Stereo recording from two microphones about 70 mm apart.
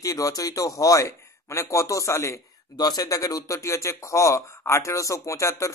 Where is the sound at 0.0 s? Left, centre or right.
Left.